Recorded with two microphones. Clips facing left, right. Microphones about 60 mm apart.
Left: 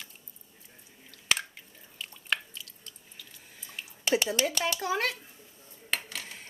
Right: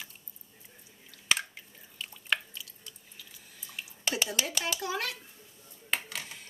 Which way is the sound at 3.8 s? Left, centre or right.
Centre.